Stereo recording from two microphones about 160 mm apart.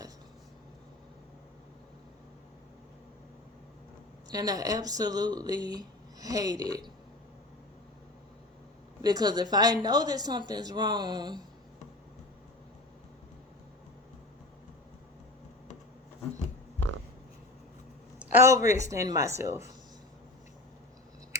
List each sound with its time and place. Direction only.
4.3 s speech: 25° right (ahead or behind)
9.0 s speech: 25° right (ahead or behind)
18.2 s speech: 10° right (ahead or behind)